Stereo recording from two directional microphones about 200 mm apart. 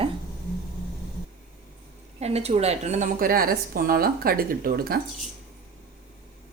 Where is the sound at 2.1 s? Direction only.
30° right (ahead or behind); by 5.0 s 45° right (ahead or behind).